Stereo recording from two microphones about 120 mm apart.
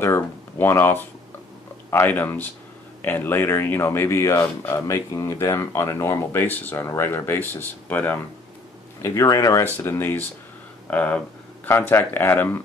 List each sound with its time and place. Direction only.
0.0 s speech: 20° left (ahead or behind)
9.0 s speech: 25° left (ahead or behind)